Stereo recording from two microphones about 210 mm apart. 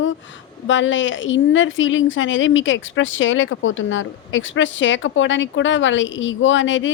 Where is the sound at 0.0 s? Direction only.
60° left (ahead or behind).